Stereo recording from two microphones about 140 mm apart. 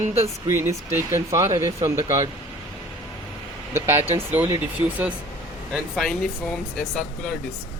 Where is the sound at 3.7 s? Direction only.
15° right (ahead or behind).